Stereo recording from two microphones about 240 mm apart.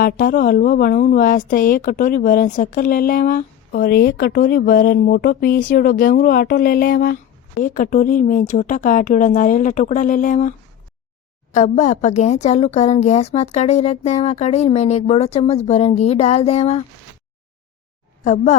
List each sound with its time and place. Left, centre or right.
0.0 s speech: left
11.5 s a woman's voice: left
18.2 s speech: left